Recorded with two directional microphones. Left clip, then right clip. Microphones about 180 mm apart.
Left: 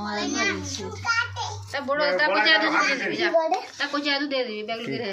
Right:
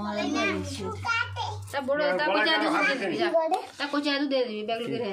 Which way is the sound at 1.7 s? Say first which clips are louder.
Left 3 dB; 70° right (ahead or behind).